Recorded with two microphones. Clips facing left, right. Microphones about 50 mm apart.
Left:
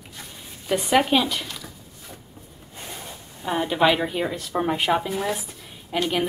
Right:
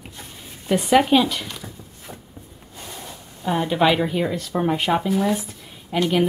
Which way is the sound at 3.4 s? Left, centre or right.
Centre.